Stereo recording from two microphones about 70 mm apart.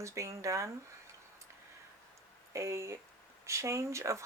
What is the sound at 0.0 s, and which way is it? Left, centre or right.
Speech, right.